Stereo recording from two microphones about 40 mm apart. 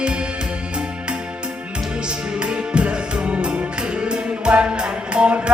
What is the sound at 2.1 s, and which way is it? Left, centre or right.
Music, right.